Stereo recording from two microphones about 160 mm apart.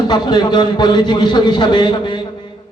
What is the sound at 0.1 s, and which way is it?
A man's voice, 25° left (ahead or behind).